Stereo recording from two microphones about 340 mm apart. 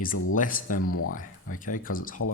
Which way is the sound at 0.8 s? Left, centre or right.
Left.